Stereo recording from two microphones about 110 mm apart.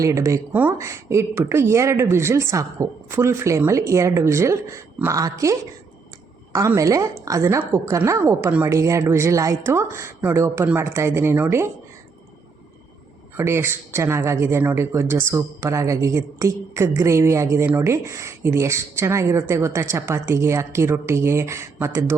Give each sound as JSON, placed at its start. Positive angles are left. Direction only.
{"t": 0.0, "sound": "speech", "side_deg": -30}
{"t": 0.5, "sound": "speech", "side_deg": -15}
{"t": 0.8, "sound": "a woman's voice", "side_deg": -25}
{"t": 13.3, "sound": "speech", "side_deg": -25}